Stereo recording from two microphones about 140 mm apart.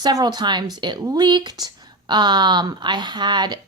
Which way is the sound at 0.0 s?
30° right (ahead or behind).